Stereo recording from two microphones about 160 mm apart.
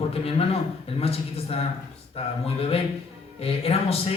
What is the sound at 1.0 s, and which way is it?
A man's voice, 40° left (ahead or behind).